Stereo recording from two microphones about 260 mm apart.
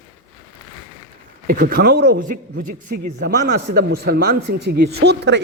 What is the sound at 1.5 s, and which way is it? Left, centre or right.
Speech, right.